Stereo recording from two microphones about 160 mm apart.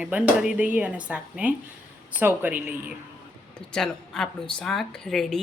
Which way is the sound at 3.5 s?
5° left (ahead or behind).